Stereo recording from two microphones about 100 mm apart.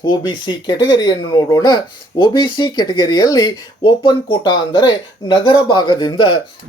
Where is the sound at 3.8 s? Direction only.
60° left (ahead or behind).